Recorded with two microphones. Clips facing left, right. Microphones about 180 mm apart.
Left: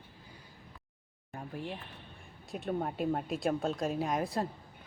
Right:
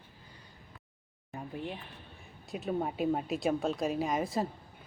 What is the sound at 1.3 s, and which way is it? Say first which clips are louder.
Speech: right 1 dB; centre (ahead or behind).